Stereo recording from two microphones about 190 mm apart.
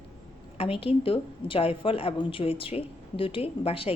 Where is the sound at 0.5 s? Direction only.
30° left (ahead or behind).